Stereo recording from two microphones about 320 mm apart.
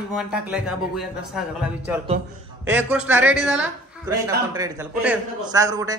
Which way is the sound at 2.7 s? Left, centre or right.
Centre.